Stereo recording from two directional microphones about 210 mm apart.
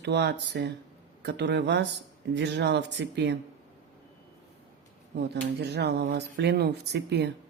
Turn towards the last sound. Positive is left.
turn(degrees=-55)  # may be behind; listen again after turning